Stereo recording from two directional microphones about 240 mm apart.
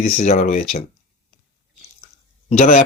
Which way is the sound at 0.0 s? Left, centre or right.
Left.